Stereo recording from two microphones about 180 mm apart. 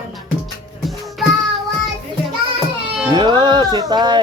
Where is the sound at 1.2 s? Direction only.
Centre (ahead or behind).